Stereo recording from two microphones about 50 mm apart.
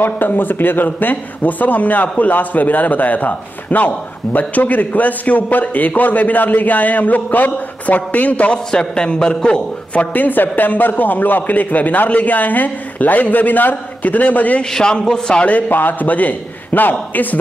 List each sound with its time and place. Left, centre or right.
0.0 s a man's voice: left; by 10.0 s centre
10.1 s a man's voice: left
14.6 s a man's voice: centre
15.5 s a man's voice: left